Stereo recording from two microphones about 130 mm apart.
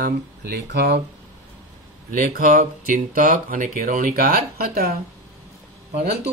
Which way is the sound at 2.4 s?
85° right.